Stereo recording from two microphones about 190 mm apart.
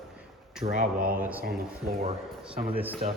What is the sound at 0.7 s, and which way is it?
Speech, 45° right (ahead or behind).